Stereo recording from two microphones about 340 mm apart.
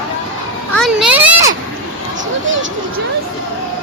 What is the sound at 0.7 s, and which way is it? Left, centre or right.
Speech, centre.